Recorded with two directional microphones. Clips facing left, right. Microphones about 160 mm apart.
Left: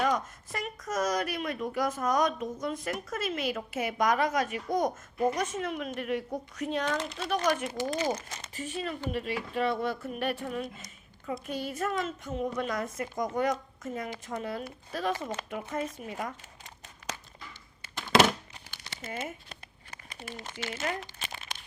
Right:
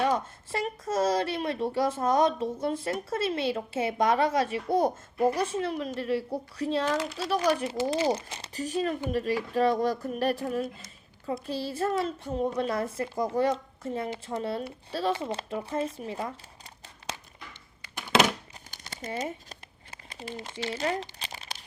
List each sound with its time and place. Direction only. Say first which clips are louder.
0.0 s speech: right 2 dB; 30° right (ahead or behind)
18.7 s crumpling: right 4 dB; 40° right (ahead or behind)
20.6 s speech: right 4 dB; 30° right (ahead or behind)